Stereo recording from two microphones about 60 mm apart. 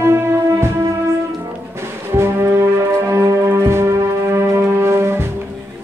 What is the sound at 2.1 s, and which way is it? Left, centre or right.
Brass instrument, right.